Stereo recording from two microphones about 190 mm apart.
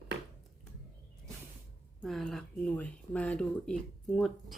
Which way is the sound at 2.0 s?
Centre (ahead or behind).